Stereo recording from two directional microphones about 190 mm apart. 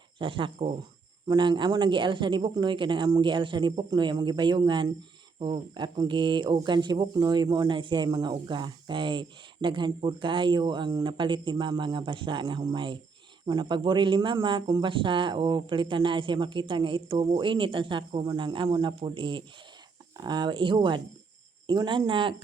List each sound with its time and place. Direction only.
0.2 s speech: 25° right (ahead or behind)